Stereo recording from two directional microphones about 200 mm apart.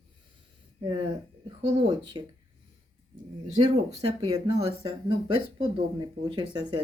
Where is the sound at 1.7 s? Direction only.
25° right (ahead or behind).